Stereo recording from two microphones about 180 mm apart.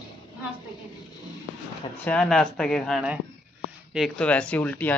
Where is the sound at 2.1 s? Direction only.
5° left (ahead or behind).